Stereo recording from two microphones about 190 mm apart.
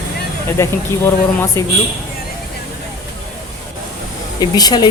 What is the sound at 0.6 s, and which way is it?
A man's voice, 15° left (ahead or behind).